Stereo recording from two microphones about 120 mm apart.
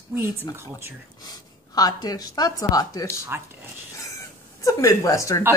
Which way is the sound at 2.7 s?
30° left (ahead or behind).